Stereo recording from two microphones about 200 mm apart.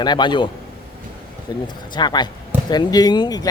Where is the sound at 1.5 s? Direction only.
20° left (ahead or behind).